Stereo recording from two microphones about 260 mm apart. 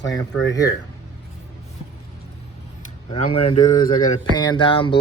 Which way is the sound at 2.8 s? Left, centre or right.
Left.